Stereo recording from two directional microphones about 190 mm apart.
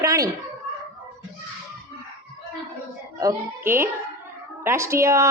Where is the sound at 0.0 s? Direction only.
15° right (ahead or behind).